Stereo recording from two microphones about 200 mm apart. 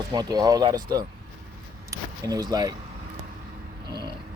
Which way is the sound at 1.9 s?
15° right (ahead or behind).